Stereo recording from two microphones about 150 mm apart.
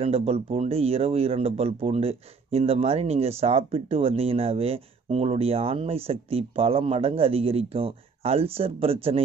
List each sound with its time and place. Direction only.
0.0 s speech: 40° right (ahead or behind)